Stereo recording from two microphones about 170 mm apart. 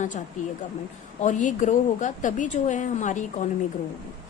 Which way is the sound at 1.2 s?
45° left (ahead or behind).